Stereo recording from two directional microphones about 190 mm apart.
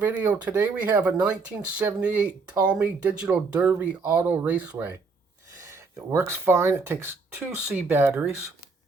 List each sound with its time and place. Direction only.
0.0 s speech: 10° right (ahead or behind)